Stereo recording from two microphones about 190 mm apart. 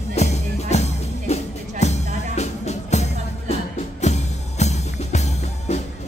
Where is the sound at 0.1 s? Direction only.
35° left (ahead or behind).